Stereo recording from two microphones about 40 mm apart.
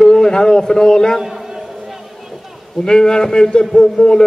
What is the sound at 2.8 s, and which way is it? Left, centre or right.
A man's voice, centre.